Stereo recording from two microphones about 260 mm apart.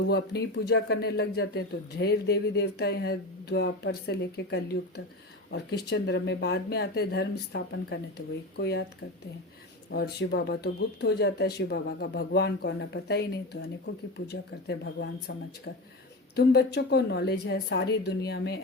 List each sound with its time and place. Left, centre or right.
0.1 s speech: left
9.9 s speech: left
16.3 s speech: left